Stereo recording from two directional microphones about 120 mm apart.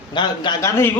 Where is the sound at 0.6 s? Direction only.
20° left (ahead or behind).